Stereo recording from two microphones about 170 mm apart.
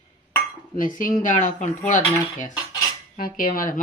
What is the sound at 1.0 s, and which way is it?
Speech, 50° left (ahead or behind).